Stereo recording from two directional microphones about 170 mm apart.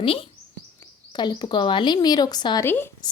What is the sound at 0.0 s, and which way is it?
A woman's voice, 35° left (ahead or behind).